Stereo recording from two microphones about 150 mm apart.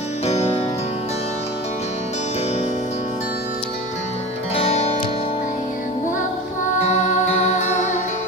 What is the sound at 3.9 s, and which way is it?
Music, 45° left (ahead or behind).